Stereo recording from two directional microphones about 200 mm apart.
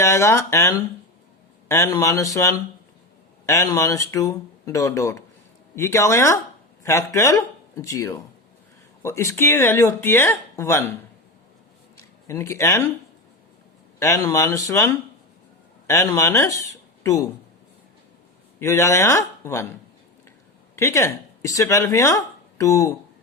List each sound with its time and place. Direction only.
0.0 s speech: 15° left (ahead or behind)
12.3 s speech: 15° left (ahead or behind)
14.0 s speech: 15° left (ahead or behind)
18.6 s speech: 15° left (ahead or behind)
20.7 s speech: 15° left (ahead or behind)